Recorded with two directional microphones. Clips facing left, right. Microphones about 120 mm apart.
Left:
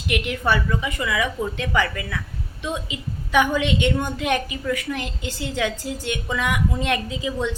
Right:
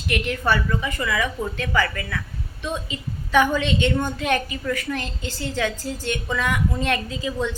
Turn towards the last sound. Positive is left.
turn(degrees=15)  # may be behind; listen again after turning